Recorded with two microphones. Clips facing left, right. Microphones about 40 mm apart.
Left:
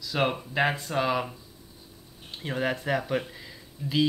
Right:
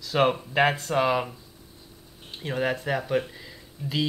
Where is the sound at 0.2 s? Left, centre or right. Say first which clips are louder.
Right 4 dB; centre.